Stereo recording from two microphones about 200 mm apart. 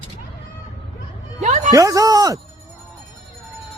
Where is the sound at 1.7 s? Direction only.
15° right (ahead or behind).